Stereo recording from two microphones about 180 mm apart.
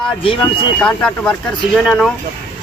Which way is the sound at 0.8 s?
5° left (ahead or behind).